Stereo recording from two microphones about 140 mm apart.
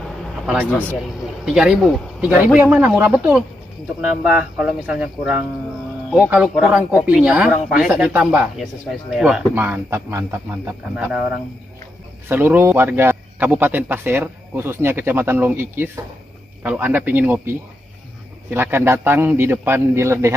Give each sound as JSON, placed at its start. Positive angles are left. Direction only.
{"t": 1.4, "sound": "a man's voice", "side_deg": -5}
{"t": 9.6, "sound": "a man's voice", "side_deg": -15}
{"t": 12.3, "sound": "a man's voice", "side_deg": -15}